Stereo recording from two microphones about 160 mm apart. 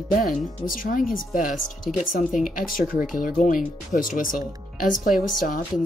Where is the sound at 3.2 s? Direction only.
55° left (ahead or behind).